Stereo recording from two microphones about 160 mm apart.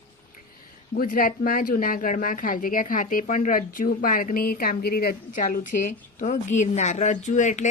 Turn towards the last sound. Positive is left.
turn(degrees=50)  # may be behind; listen again after turning